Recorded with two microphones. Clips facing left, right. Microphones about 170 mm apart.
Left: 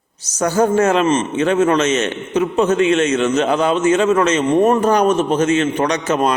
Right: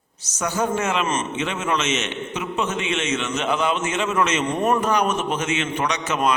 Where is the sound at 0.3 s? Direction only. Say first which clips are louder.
Left 8 dB; 35° left (ahead or behind).